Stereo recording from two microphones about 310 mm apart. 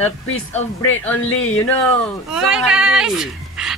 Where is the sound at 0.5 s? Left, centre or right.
Centre.